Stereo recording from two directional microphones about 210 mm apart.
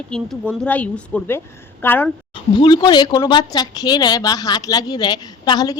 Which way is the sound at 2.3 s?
20° left (ahead or behind).